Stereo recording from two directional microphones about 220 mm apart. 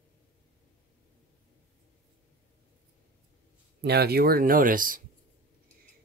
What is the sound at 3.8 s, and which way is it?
Speech, 45° right (ahead or behind).